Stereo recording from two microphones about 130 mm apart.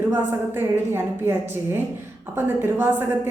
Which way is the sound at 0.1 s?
15° right (ahead or behind).